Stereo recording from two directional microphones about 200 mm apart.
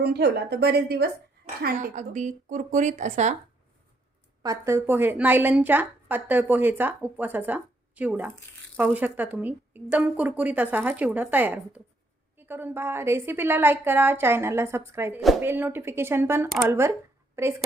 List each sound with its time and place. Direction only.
0.0 s speech: 55° right (ahead or behind)
1.6 s speech: 40° right (ahead or behind)
4.4 s a woman's voice: 15° right (ahead or behind)